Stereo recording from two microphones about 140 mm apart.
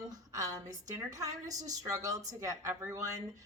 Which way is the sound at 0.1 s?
25° right (ahead or behind).